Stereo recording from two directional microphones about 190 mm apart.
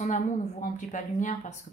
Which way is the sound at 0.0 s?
40° left (ahead or behind).